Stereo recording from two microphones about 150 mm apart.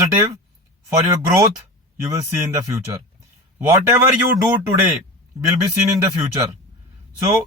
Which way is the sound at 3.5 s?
20° right (ahead or behind).